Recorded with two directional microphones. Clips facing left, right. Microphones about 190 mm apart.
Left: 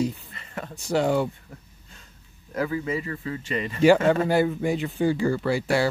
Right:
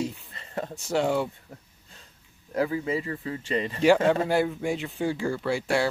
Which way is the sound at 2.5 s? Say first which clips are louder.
Even; 25° right (ahead or behind).